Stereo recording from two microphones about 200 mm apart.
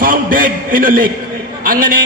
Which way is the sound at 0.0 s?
45° right (ahead or behind).